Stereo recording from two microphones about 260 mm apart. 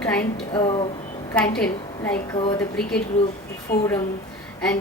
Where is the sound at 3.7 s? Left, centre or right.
Left.